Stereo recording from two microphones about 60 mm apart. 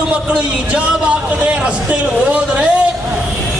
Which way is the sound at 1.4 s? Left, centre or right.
Centre.